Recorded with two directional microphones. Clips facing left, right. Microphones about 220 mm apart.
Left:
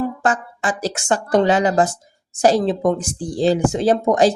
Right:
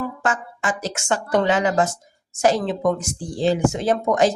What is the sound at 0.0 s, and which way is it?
Speech, 35° left (ahead or behind).